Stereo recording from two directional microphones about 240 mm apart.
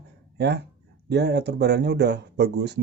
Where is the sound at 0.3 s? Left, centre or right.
Right.